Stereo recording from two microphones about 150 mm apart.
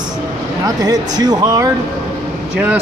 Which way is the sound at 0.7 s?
25° right (ahead or behind).